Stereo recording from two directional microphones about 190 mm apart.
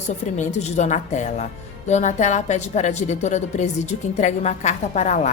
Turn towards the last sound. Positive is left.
turn(degrees=40)  # may be behind; listen again after turning